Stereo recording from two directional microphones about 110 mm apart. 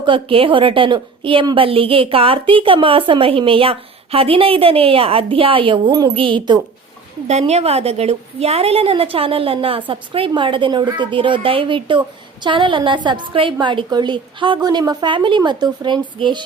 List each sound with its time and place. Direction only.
0.0 s a woman's voice: 50° right (ahead or behind)
7.3 s a woman's voice: 85° right; by 16.4 s 45° right (ahead or behind)